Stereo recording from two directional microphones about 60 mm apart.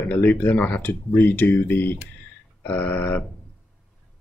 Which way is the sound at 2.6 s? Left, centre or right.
Left.